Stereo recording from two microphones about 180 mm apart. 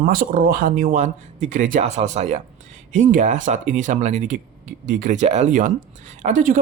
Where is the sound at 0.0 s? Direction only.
50° right (ahead or behind).